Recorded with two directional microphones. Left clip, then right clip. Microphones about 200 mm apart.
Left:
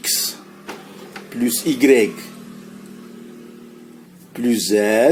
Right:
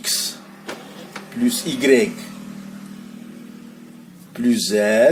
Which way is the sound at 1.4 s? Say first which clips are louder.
Left 3 dB; 40° left (ahead or behind).